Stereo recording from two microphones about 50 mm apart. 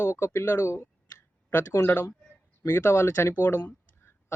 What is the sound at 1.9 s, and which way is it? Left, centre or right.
A man's voice, left.